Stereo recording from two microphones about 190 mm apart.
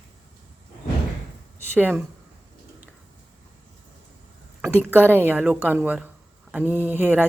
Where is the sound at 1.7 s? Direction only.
10° right (ahead or behind).